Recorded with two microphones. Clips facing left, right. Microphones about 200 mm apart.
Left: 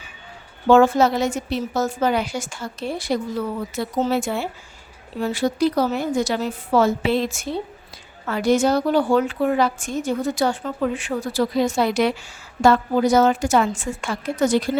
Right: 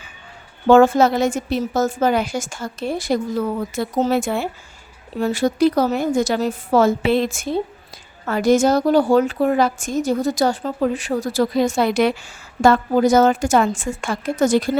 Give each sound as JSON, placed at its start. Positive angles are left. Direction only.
{"t": 0.7, "sound": "a woman's voice", "side_deg": -50}